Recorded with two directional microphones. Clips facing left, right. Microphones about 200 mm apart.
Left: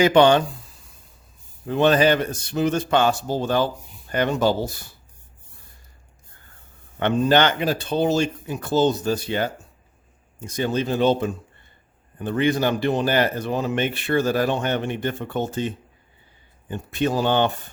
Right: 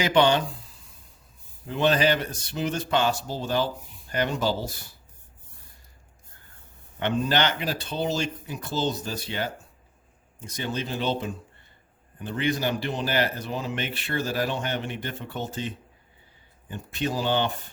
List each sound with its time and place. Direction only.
0.0 s a man's voice: 50° left (ahead or behind)
1.6 s a man's voice: 55° left (ahead or behind)
7.0 s a man's voice: 55° left (ahead or behind)
10.6 s a man's voice: 50° left (ahead or behind)
16.6 s speech: 55° left (ahead or behind)